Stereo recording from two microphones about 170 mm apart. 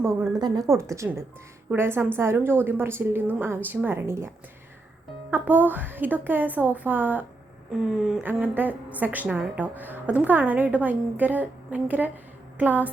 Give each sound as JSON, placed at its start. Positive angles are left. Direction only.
{"t": 0.0, "sound": "a woman's voice", "side_deg": -15}
{"t": 5.3, "sound": "a woman's voice", "side_deg": -10}